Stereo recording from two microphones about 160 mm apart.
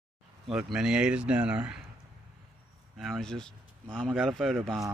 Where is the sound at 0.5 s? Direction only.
5° right (ahead or behind).